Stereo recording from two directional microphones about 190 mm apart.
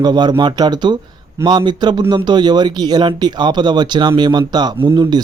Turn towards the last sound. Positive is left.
turn(degrees=-25)  # may be behind; listen again after turning